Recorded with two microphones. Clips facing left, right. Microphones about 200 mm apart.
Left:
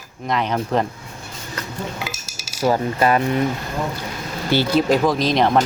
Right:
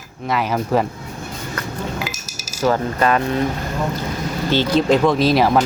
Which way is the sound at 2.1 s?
30° left (ahead or behind).